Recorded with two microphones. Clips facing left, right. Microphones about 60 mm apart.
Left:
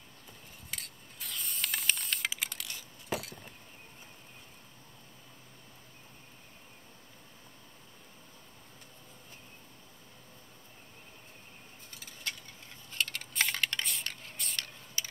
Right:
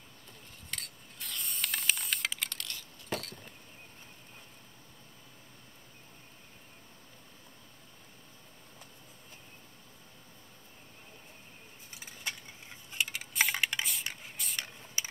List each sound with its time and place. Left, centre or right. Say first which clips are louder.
0.7 s mechanisms: right 1 dB; centre
11.9 s coin: right 1 dB; centre
14.0 s a sound: even; centre
15.0 s mechanisms: right 1 dB; right